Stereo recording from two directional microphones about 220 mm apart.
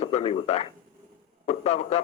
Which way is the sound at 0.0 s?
25° left (ahead or behind).